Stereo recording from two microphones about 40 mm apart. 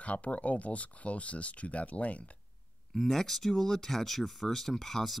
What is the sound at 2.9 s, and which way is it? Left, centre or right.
Speech, centre.